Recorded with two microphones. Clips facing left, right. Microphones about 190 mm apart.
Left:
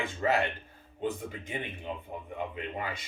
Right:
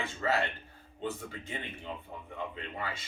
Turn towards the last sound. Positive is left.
turn(degrees=15)  # may be behind; listen again after turning